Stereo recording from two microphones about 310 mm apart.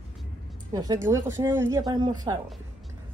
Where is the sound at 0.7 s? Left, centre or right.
Centre.